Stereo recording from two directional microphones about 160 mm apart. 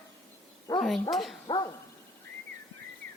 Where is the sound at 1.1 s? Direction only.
Centre (ahead or behind).